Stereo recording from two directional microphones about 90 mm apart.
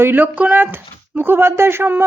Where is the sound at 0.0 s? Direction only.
20° right (ahead or behind).